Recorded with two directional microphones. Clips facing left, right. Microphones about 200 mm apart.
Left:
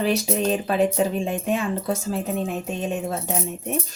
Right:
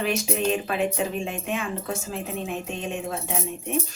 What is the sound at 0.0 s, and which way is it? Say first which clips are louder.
Speech: left 3 dB; 35° left (ahead or behind).